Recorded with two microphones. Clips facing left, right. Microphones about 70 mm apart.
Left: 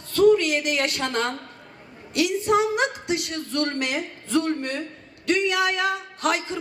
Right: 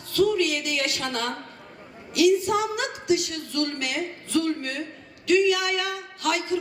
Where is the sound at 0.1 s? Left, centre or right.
Left.